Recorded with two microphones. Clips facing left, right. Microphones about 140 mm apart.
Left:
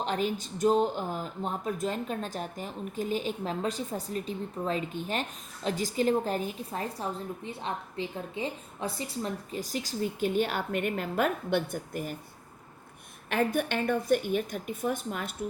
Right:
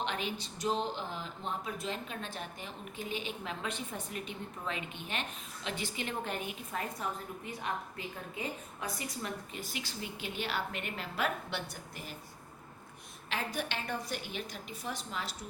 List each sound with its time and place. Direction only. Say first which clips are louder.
0.0 s a woman's voice: left 7 dB; 40° left (ahead or behind)
13.3 s a woman's voice: left 9 dB; 50° left (ahead or behind)